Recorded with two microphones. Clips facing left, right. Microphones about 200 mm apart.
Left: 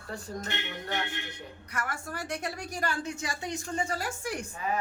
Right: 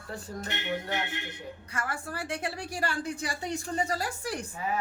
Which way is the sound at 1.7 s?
30° right (ahead or behind).